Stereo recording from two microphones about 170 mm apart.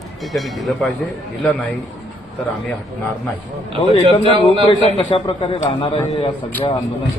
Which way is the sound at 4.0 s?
30° right (ahead or behind).